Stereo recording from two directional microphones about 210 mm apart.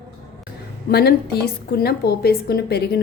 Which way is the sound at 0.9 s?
50° left (ahead or behind).